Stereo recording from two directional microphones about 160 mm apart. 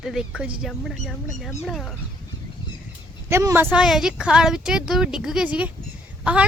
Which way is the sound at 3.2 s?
15° right (ahead or behind).